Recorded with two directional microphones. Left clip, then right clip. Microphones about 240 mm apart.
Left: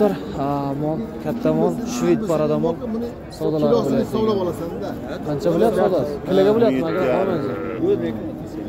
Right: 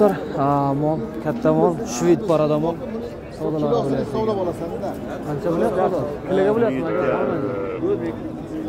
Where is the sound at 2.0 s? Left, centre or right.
Centre.